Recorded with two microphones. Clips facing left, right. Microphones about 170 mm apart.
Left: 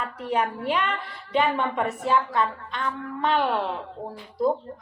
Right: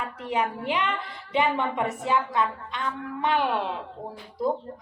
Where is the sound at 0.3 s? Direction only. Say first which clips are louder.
Left 2 dB; 15° right (ahead or behind).